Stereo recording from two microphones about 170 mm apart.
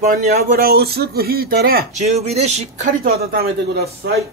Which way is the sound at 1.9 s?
40° right (ahead or behind).